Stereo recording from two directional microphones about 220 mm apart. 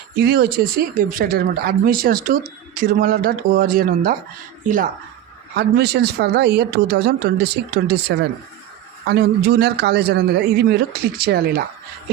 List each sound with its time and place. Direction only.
0.2 s speech: 45° right (ahead or behind)
5.5 s a man's voice: 50° right (ahead or behind)